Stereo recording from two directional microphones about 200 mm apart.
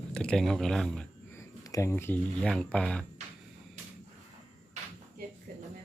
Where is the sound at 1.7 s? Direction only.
15° left (ahead or behind).